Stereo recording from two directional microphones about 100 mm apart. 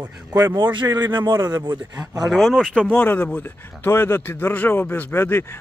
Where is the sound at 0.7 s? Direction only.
50° right (ahead or behind).